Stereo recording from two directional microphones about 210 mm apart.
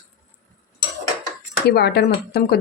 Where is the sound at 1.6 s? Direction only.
50° left (ahead or behind).